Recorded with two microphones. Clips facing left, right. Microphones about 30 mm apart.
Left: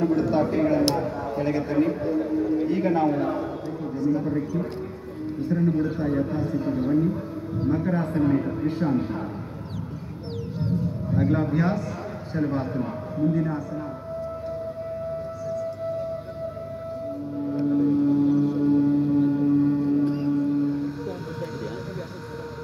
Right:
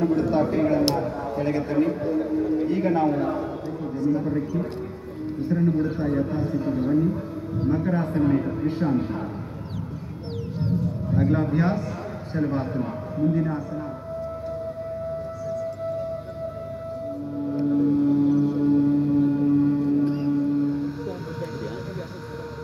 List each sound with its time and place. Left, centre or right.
0.0 s speech: centre
0.9 s a sound: centre
4.0 s speech: centre
5.8 s a man's voice: centre
10.6 s music: centre
11.5 s a man's voice: centre
12.4 s a man's voice: centre
15.4 s music: centre
17.5 s civil defense siren: centre